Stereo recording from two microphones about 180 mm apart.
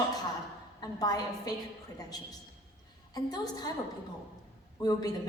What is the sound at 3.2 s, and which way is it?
Speech, 20° left (ahead or behind).